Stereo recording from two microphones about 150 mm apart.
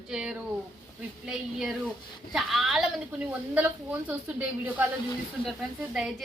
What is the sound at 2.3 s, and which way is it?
A woman's voice, centre (ahead or behind).